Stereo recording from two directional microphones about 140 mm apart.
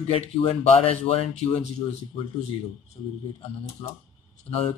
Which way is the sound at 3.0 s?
35° left (ahead or behind).